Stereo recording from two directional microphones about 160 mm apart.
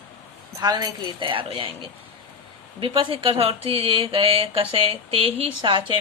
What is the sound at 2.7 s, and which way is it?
Speech, 35° right (ahead or behind).